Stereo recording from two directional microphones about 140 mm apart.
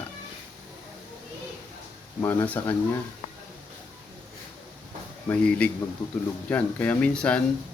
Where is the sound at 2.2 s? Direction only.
10° left (ahead or behind).